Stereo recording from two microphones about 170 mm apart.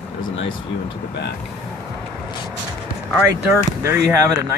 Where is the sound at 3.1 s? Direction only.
10° right (ahead or behind).